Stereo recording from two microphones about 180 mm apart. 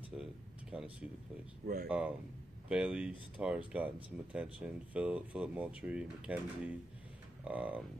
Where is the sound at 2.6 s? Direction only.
5° right (ahead or behind).